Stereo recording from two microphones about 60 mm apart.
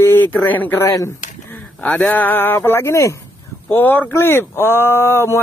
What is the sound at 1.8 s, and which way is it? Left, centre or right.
Speech, centre.